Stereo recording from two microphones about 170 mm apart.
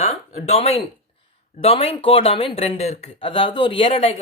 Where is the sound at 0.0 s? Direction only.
40° left (ahead or behind).